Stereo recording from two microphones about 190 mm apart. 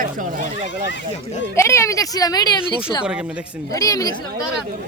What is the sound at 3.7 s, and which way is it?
Speech, 20° left (ahead or behind).